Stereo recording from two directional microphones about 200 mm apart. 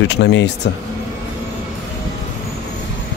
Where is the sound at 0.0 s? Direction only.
60° left (ahead or behind).